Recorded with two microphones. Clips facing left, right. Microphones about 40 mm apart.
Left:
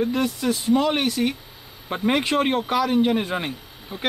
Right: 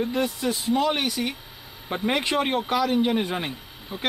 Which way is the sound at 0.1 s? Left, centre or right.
Centre.